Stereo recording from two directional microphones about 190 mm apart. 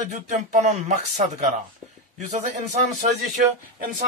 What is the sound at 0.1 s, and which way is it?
A man's voice, 40° right (ahead or behind).